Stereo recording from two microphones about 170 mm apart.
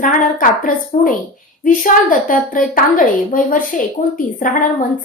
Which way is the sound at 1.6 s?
50° left (ahead or behind).